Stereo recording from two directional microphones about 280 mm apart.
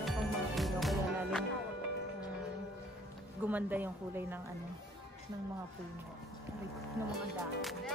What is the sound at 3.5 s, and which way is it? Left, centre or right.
Speech, centre.